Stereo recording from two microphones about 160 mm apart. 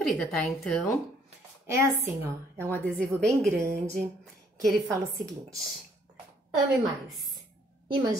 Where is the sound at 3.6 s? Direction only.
15° right (ahead or behind).